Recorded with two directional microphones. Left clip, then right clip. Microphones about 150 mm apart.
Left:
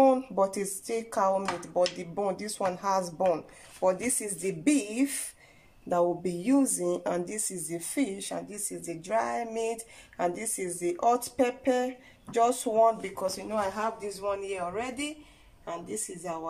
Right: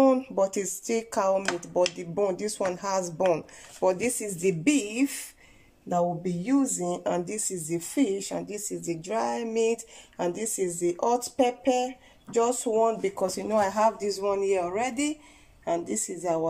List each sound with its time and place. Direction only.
0.0 s speech: 5° right (ahead or behind)
13.0 s speech: 25° right (ahead or behind)